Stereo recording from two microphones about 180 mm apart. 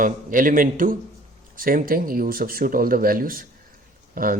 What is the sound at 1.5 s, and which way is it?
Speech, 50° right (ahead or behind).